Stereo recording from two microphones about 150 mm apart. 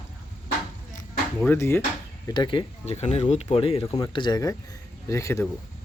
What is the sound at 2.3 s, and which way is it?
Speech, 30° left (ahead or behind).